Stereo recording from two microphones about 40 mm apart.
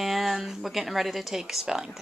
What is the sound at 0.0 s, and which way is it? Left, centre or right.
Speech, centre.